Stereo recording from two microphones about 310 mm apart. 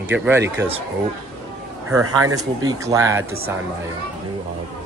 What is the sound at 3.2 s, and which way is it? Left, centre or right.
Speech, right.